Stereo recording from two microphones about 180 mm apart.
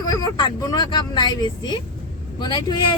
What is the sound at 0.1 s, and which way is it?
Speech, 25° left (ahead or behind).